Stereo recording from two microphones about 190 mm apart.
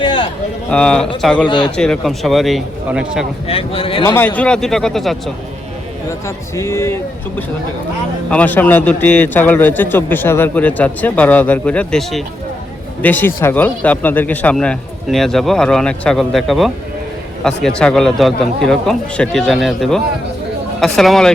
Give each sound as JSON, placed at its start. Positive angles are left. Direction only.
{"t": 0.0, "sound": "a sound", "side_deg": 25}
{"t": 0.7, "sound": "a man's voice", "side_deg": 5}
{"t": 1.5, "sound": "speech", "side_deg": 25}
{"t": 1.7, "sound": "a man's voice", "side_deg": 5}
{"t": 3.4, "sound": "speech", "side_deg": 30}
{"t": 4.0, "sound": "a man's voice", "side_deg": 10}
{"t": 6.1, "sound": "a man's voice", "side_deg": 15}